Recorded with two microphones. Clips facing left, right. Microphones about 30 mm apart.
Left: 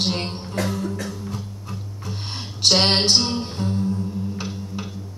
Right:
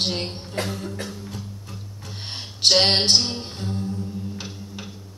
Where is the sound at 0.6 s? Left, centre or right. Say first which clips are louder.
Left 2 dB; right.